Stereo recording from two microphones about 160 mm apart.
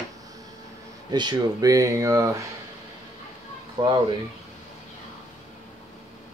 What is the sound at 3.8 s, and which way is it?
Speech, 35° right (ahead or behind).